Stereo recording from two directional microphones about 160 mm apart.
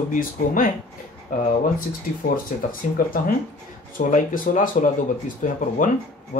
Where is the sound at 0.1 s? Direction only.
60° left (ahead or behind).